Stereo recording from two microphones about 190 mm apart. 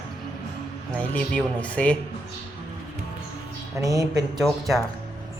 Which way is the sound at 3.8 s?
20° right (ahead or behind).